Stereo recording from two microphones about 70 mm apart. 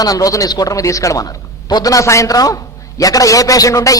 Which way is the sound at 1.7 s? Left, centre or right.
Left.